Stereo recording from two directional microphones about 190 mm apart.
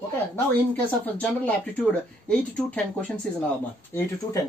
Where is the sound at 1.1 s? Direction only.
5° left (ahead or behind).